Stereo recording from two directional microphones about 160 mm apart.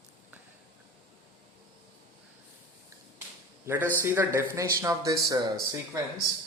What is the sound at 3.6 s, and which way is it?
A man's voice, 10° right (ahead or behind).